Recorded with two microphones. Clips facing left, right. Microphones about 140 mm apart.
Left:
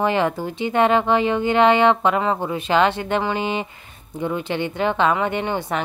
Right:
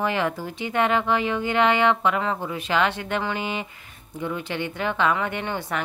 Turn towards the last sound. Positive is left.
turn(degrees=20)  # may be behind; listen again after turning